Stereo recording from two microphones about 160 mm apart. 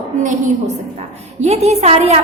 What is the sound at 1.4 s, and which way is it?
Speech, 40° right (ahead or behind).